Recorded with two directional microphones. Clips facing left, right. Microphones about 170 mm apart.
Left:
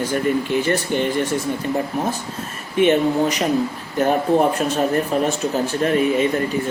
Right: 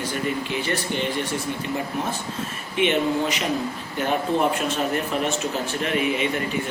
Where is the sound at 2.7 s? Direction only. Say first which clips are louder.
Left 5 dB; 40° left (ahead or behind).